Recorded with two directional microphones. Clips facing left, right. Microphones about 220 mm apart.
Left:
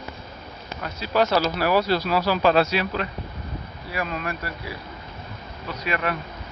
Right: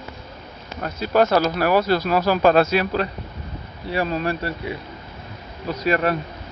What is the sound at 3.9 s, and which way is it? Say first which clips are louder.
Speech: right 6 dB; 30° right (ahead or behind).